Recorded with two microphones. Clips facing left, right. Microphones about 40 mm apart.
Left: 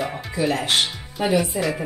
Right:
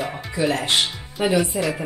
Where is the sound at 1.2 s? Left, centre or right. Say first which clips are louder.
Right 1 dB; right.